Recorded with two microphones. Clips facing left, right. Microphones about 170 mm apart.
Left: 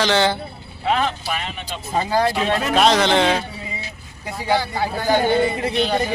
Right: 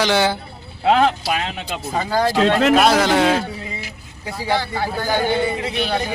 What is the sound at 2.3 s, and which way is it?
Speech, 90° right.